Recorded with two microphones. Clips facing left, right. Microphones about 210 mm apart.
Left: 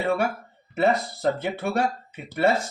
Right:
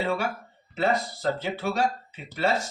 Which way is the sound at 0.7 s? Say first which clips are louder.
Left 3 dB; 55° left (ahead or behind).